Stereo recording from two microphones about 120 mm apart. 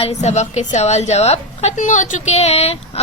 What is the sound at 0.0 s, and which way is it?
A woman's voice, 60° left (ahead or behind).